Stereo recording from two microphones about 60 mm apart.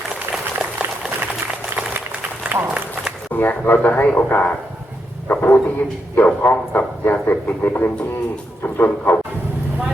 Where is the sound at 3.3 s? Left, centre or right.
Left.